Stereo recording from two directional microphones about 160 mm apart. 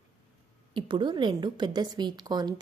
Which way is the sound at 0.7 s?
30° right (ahead or behind).